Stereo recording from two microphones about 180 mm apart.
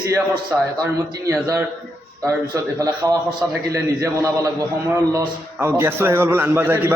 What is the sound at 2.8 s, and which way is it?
A man's voice, 20° right (ahead or behind).